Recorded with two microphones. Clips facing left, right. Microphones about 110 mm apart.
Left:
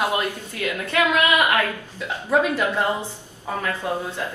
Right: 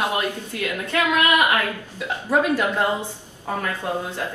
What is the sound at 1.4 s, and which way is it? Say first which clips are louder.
A woman's voice: even; 15° right (ahead or behind).